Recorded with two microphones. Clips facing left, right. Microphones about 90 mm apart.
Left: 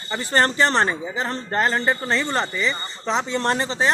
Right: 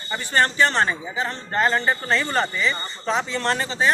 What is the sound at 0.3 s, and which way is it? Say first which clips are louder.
A man's voice: left 1 dB; 35° left (ahead or behind).